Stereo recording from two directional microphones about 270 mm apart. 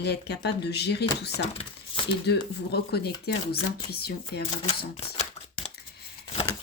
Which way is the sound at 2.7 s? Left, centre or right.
Left.